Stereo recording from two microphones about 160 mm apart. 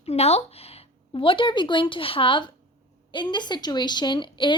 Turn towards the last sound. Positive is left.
turn(degrees=30)  # may be behind; listen again after turning